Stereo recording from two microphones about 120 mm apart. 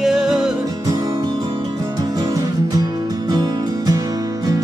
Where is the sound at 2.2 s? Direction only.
30° right (ahead or behind).